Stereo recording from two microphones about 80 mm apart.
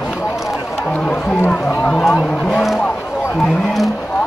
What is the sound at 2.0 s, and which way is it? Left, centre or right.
Speech, centre.